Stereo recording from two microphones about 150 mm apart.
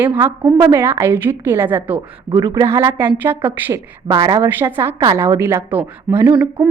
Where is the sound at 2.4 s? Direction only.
25° right (ahead or behind).